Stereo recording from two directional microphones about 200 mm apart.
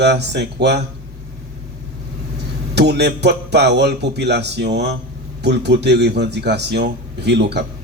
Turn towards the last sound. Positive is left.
turn(degrees=-55)  # may be behind; listen again after turning